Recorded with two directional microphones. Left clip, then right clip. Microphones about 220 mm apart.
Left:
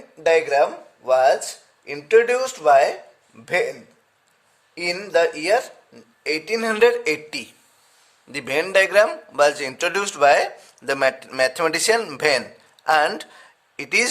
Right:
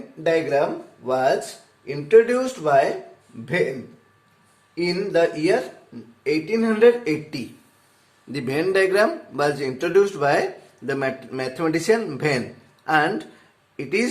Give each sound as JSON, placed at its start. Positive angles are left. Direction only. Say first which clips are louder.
{"t": 0.2, "sound": "a man's voice", "louder": "left 3 dB", "side_deg": 45}
{"t": 4.7, "sound": "a man's voice", "louder": "left 1 dB", "side_deg": 45}